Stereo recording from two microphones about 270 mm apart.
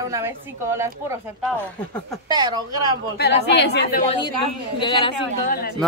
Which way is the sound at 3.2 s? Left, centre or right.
Left.